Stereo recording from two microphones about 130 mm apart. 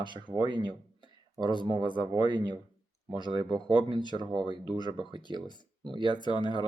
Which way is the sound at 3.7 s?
35° left (ahead or behind).